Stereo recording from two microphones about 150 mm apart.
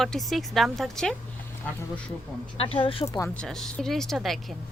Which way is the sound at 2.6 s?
40° left (ahead or behind).